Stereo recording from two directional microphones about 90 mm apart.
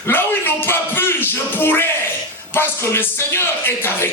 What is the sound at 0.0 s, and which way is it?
Music, 25° left (ahead or behind).